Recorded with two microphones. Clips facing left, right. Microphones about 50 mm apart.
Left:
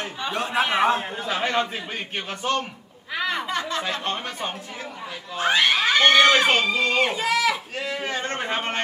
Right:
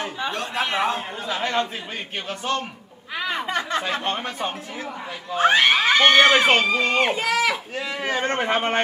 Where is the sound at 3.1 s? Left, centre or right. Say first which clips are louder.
Left 1 dB; centre.